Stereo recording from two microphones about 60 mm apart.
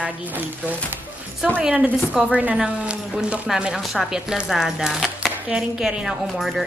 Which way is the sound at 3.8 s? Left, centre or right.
Centre.